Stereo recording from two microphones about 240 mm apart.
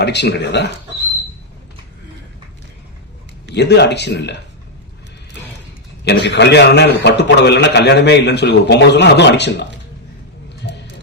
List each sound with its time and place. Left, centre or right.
0.0 s a man's voice: left
3.5 s a man's voice: left
6.1 s a man's voice: left
10.6 s music: left